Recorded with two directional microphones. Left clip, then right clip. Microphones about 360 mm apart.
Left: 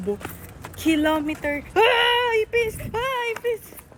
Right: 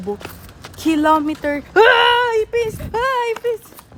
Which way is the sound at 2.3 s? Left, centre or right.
Centre.